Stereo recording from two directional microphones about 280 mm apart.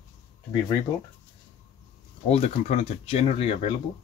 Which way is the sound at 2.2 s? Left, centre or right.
Left.